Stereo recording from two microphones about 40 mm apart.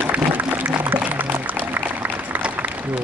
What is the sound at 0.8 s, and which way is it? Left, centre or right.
Music, right.